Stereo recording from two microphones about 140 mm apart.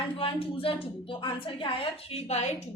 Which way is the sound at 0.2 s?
40° left (ahead or behind).